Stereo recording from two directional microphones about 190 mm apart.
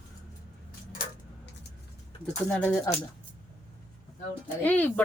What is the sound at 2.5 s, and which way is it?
Speech, 10° left (ahead or behind).